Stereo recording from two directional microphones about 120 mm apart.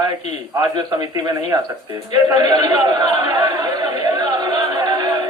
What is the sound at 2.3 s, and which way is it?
Speech, 35° right (ahead or behind).